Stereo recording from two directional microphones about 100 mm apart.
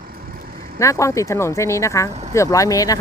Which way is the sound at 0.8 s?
30° left (ahead or behind).